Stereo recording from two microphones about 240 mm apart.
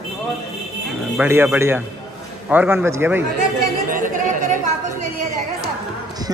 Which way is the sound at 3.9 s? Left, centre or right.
Right.